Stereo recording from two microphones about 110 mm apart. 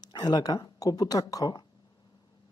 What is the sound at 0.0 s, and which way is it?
Speech, 40° left (ahead or behind).